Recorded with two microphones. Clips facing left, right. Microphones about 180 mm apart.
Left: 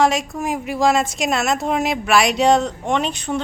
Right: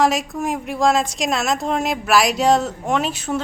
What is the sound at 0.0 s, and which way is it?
A woman's voice, centre (ahead or behind).